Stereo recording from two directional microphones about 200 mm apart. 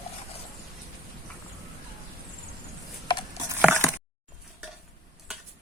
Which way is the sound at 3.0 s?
25° left (ahead or behind).